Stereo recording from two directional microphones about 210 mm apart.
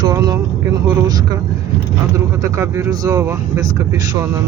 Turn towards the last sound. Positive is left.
turn(degrees=-15)  # may be behind; listen again after turning